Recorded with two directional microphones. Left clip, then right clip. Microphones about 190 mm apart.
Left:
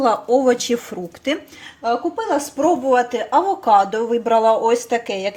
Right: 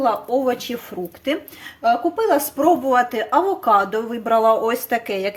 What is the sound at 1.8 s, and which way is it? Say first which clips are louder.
Speech: right 3 dB; 10° right (ahead or behind).